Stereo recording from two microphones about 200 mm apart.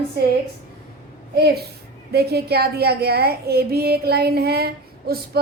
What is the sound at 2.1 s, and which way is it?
A woman's voice, 50° right (ahead or behind).